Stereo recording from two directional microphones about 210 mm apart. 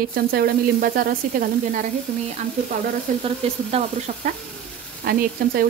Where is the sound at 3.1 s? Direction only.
40° right (ahead or behind).